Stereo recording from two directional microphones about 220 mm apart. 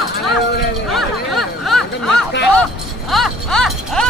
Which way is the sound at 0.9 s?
Centre (ahead or behind).